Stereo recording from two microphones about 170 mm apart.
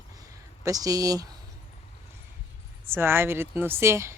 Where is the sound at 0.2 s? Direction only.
20° right (ahead or behind).